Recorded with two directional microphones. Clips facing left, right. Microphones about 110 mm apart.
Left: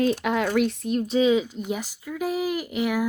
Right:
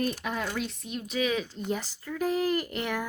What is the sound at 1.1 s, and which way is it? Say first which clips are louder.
Speech: left 8 dB; 25° left (ahead or behind).